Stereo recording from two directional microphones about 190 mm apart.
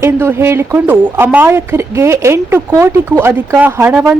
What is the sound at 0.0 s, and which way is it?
A woman's voice, 10° right (ahead or behind).